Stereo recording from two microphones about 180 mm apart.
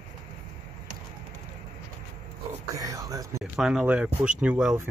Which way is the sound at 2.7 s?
20° right (ahead or behind).